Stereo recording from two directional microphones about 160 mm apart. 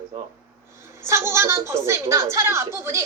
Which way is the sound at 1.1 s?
15° right (ahead or behind).